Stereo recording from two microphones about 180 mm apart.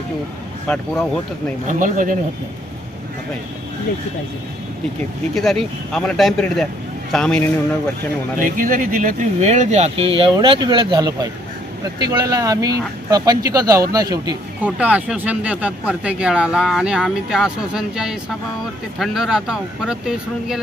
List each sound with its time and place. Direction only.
1.6 s speech: 45° right (ahead or behind)
5.3 s speech: centre (ahead or behind)
8.4 s speech: 50° right (ahead or behind); by 14.3 s 20° right (ahead or behind)
14.6 s speech: 10° right (ahead or behind)